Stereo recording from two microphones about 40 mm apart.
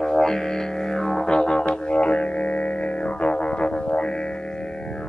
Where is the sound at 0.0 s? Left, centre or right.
Centre.